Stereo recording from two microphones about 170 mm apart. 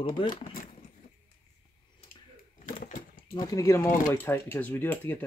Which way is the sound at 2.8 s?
60° left (ahead or behind).